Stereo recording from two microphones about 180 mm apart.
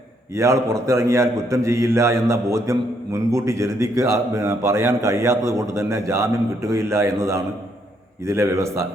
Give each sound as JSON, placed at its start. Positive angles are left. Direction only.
{"t": 0.3, "sound": "a man's voice", "side_deg": -15}